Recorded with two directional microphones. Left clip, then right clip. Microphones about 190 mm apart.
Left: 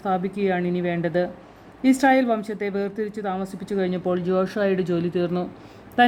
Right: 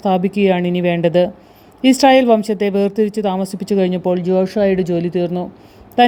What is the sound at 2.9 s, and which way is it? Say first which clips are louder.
Speech: right 11 dB; 55° right (ahead or behind).